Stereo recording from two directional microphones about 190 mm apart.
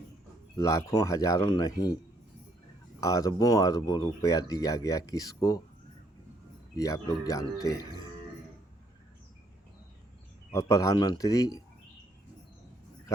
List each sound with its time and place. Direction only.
0.5 s speech: 15° left (ahead or behind)
3.0 s speech: 20° left (ahead or behind)
6.7 s speech: 20° left (ahead or behind)
10.5 s speech: 15° left (ahead or behind)